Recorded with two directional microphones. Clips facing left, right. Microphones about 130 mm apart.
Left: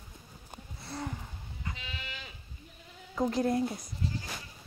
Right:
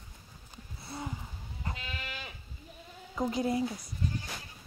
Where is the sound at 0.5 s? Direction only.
60° left (ahead or behind).